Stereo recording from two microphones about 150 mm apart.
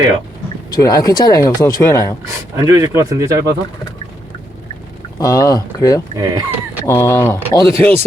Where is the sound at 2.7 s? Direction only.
20° right (ahead or behind).